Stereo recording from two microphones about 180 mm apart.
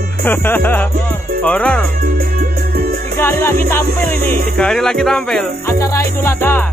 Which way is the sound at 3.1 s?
15° left (ahead or behind).